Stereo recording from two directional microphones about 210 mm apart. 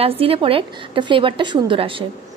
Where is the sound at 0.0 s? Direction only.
25° right (ahead or behind).